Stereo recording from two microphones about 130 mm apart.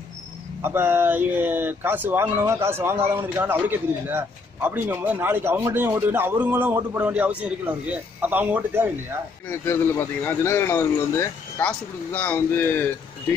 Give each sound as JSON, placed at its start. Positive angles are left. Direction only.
{"t": 0.6, "sound": "speech", "side_deg": -20}
{"t": 9.5, "sound": "speech", "side_deg": 20}